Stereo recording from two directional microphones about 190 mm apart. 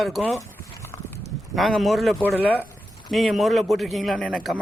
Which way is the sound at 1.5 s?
Centre (ahead or behind).